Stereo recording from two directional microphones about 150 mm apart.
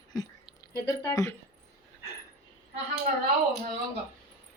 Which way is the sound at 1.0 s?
20° left (ahead or behind).